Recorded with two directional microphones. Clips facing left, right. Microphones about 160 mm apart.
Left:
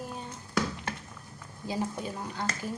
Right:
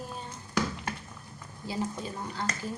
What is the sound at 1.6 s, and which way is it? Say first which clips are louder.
Speech: left 1 dB; 15° left (ahead or behind).